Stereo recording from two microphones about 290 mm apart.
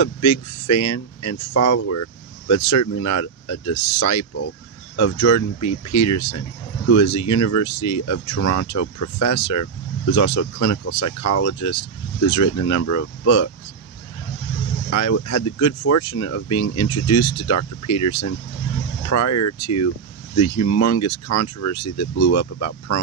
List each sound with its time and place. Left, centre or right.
0.0 s speech: left
14.9 s speech: left